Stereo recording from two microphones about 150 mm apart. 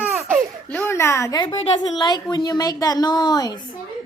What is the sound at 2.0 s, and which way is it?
A woman's voice, 30° left (ahead or behind).